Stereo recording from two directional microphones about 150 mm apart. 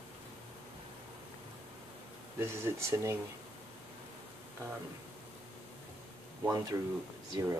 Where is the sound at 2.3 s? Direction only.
15° right (ahead or behind).